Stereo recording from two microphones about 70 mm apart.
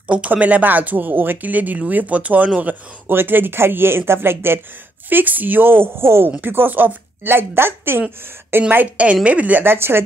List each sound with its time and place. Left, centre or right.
0.1 s a woman's voice: centre
8.6 s speech: centre
9.7 s a woman's voice: right